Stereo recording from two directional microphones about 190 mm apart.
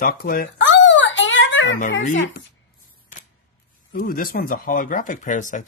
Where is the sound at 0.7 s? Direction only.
80° left.